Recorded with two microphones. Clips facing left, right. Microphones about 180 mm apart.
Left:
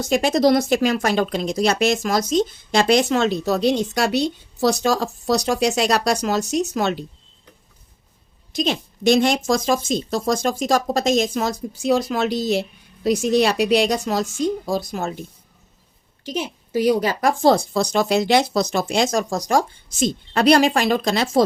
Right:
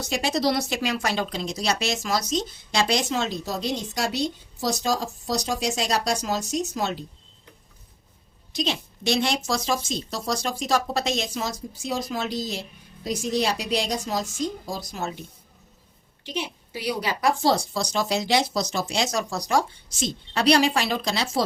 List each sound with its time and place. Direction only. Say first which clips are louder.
0.0 s speech: left 7 dB; 55° left (ahead or behind); by 6.9 s 70° left (ahead or behind)
8.5 s a woman's voice: left 5 dB; 50° left (ahead or behind)
16.2 s a woman's voice: left 5 dB; 45° left (ahead or behind)